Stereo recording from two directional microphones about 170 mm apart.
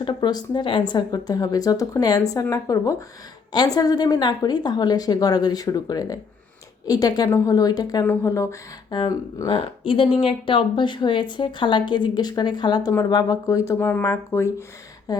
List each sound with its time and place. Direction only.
0.0 s a woman's voice: 25° left (ahead or behind)